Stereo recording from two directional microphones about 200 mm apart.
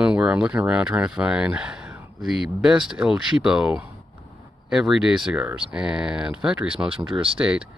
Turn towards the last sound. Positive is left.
turn(degrees=-5)  # may be behind; listen again after turning